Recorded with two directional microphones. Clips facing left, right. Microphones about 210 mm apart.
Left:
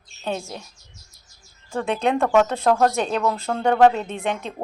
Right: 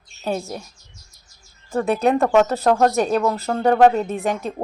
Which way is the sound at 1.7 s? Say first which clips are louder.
Right 4 dB; 5° right (ahead or behind).